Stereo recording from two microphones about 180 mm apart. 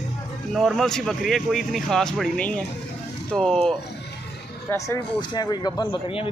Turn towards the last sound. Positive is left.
turn(degrees=30)  # may be behind; listen again after turning